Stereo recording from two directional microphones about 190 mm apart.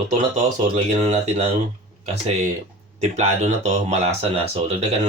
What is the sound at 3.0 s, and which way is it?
Speech, 35° right (ahead or behind).